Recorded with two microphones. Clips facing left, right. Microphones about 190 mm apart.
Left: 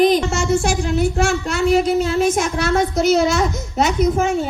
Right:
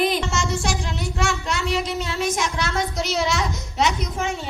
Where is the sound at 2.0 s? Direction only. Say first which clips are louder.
Left 8 dB; centre (ahead or behind).